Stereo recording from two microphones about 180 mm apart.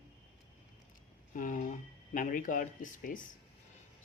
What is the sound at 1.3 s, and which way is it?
Speech, 50° left (ahead or behind).